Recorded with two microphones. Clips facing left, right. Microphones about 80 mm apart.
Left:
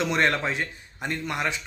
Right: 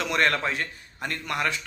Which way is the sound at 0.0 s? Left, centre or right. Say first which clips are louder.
Left 1 dB; left.